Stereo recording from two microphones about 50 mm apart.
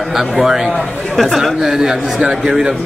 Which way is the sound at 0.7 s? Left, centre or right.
Centre.